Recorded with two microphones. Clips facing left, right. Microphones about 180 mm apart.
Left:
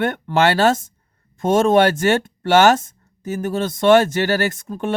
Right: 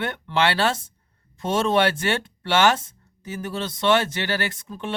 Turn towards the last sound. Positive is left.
turn(degrees=45)  # may be behind; listen again after turning